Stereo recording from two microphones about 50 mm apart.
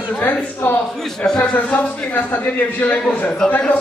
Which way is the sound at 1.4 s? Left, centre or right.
Left.